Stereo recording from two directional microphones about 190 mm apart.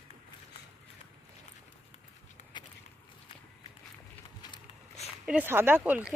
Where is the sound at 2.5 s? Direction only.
25° left (ahead or behind).